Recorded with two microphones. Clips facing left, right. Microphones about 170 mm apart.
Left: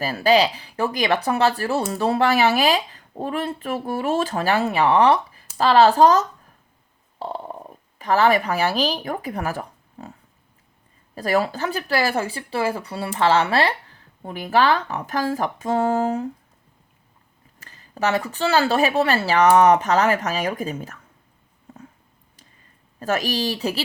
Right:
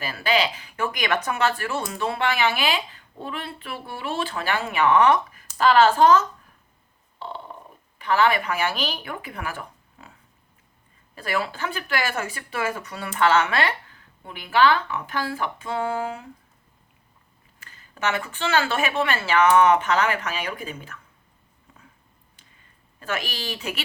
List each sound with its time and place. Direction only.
0.0 s speech: 40° left (ahead or behind)
7.2 s a sound: 40° left (ahead or behind)
7.9 s speech: 40° left (ahead or behind)
11.1 s speech: 40° left (ahead or behind)
17.6 s speech: 40° left (ahead or behind)
21.7 s dog: 45° left (ahead or behind)
23.0 s speech: 40° left (ahead or behind)